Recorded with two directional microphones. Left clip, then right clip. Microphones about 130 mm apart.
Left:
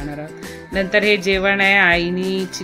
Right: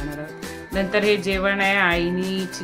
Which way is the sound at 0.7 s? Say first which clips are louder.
Left 4 dB; 20° left (ahead or behind).